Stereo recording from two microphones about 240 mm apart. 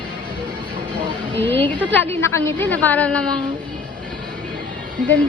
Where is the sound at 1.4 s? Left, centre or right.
Centre.